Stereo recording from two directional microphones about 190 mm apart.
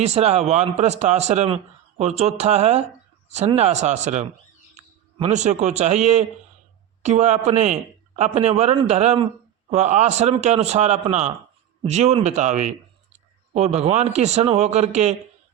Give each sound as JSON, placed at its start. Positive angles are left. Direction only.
{"t": 0.0, "sound": "speech", "side_deg": -35}
{"t": 13.7, "sound": "speech", "side_deg": -35}